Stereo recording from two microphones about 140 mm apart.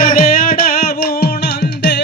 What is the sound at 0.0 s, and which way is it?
Music, 90° left.